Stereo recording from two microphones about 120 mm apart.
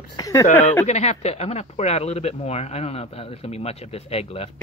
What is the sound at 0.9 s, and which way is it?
Speech, 70° left (ahead or behind).